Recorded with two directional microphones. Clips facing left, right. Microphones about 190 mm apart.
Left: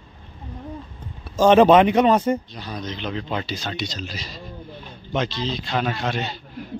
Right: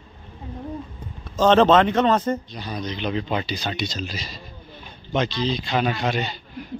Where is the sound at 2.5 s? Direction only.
Centre (ahead or behind).